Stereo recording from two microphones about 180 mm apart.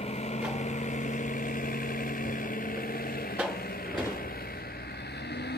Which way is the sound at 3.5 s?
55° left (ahead or behind).